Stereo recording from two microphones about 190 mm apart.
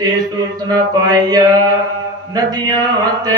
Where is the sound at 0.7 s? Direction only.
20° right (ahead or behind).